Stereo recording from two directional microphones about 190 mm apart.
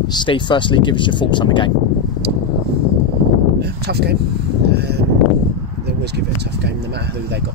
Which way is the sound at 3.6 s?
60° right (ahead or behind).